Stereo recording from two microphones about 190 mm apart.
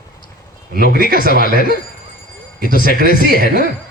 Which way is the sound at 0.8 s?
50° left (ahead or behind).